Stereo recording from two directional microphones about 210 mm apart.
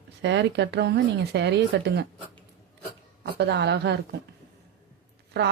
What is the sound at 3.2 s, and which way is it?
Speech, 50° right (ahead or behind).